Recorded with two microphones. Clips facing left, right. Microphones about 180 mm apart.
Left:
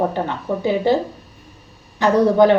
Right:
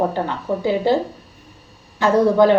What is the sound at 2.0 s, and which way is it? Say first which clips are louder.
Speech: left 1 dB; 20° left (ahead or behind).